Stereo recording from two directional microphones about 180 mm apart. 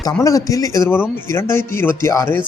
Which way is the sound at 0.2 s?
20° left (ahead or behind).